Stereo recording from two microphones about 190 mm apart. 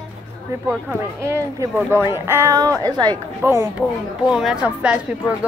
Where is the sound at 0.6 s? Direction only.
15° right (ahead or behind).